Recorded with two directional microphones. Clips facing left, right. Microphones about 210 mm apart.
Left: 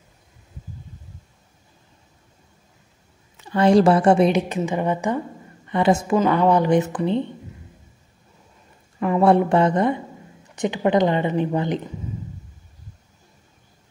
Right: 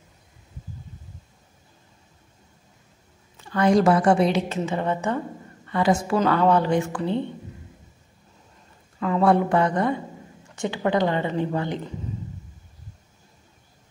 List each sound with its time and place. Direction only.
3.4 s a woman's voice: 25° left (ahead or behind)
5.7 s a woman's voice: 25° left (ahead or behind)
6.1 s speech: 15° left (ahead or behind)
9.0 s a woman's voice: 25° left (ahead or behind)